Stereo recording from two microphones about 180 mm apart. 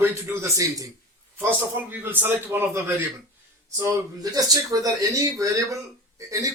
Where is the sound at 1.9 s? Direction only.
10° right (ahead or behind).